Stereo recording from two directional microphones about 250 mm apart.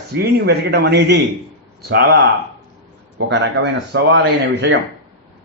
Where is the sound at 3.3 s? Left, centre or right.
Right.